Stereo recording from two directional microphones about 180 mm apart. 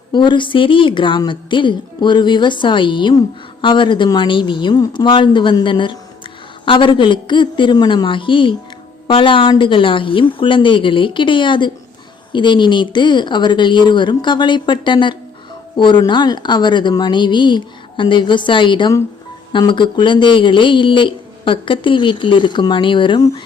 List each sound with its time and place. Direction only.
0.1 s a woman's voice: 25° left (ahead or behind)